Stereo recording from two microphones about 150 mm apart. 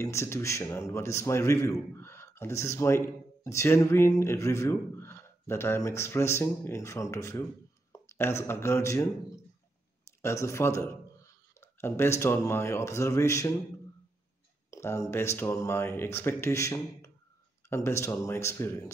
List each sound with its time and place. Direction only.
0.0 s speech: 15° left (ahead or behind)
10.2 s a man's voice: 20° left (ahead or behind)
14.7 s speech: 20° left (ahead or behind)